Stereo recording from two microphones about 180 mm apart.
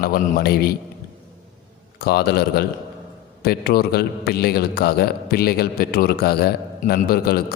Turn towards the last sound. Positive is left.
turn(degrees=60)  # may be behind; listen again after turning